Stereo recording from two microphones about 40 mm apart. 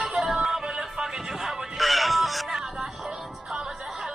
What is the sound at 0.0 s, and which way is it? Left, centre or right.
Music, right.